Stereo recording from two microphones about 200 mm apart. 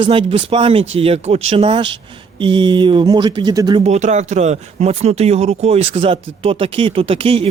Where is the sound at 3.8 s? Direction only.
35° right (ahead or behind).